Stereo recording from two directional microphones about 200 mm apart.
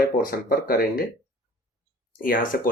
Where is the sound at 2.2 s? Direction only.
45° left (ahead or behind).